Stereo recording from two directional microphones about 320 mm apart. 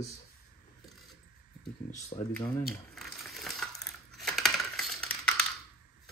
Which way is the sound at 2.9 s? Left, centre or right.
Centre.